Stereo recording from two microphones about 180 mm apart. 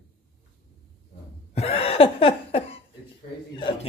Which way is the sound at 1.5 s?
35° left (ahead or behind).